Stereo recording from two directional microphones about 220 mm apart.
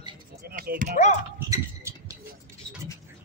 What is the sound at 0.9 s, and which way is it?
Speech, 30° left (ahead or behind).